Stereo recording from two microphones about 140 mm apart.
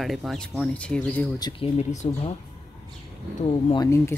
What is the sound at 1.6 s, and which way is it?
Speech, 45° left (ahead or behind).